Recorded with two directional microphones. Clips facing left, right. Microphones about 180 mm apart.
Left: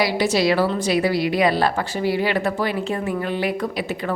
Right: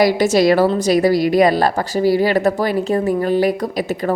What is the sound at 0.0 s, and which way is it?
A woman's voice, 45° right (ahead or behind).